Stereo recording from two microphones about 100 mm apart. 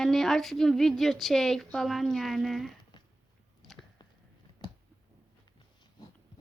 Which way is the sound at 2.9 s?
45° left (ahead or behind).